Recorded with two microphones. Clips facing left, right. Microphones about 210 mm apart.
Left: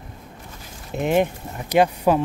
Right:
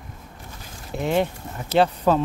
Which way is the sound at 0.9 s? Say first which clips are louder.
Left 3 dB; 15° left (ahead or behind).